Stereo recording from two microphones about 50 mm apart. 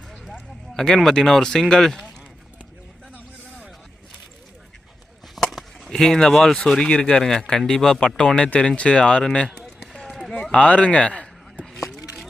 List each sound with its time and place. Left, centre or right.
0.7 s speech: centre
5.3 s a sound: centre
6.0 s speech: centre
9.6 s run: centre
10.1 s run: centre
10.5 s a man's voice: left
11.6 s a sound: centre